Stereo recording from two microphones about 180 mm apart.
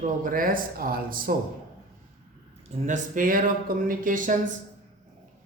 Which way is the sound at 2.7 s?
45° right (ahead or behind).